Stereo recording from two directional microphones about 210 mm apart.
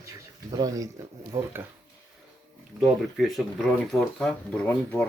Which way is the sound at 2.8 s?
Centre (ahead or behind).